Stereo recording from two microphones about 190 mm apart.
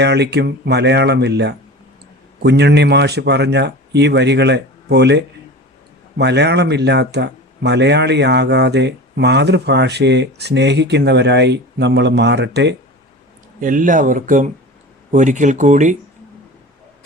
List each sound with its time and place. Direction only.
0.0 s speech: 60° right (ahead or behind)
13.6 s speech: 45° right (ahead or behind)